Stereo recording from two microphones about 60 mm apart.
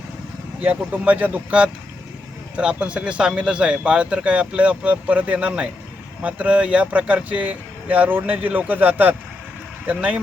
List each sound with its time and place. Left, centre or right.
0.6 s speech: right